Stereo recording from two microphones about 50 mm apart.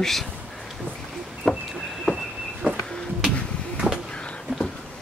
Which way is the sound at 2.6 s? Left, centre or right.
Right.